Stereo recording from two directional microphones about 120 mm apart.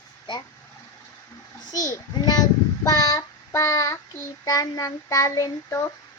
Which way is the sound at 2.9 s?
30° left (ahead or behind).